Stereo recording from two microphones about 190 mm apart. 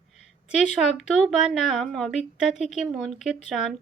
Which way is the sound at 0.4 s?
Centre (ahead or behind).